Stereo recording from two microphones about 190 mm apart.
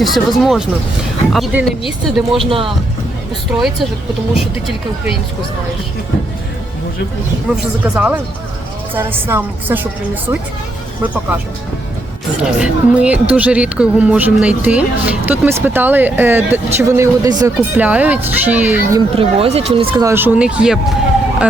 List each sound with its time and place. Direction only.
0.0 s speech: centre (ahead or behind)
2.5 s speech: 30° right (ahead or behind)
3.5 s speech: 5° right (ahead or behind)
7.5 s speech: 10° right (ahead or behind)
12.4 s speech: 5° right (ahead or behind)
19.1 s speech: 30° right (ahead or behind)
20.0 s speech: 15° right (ahead or behind)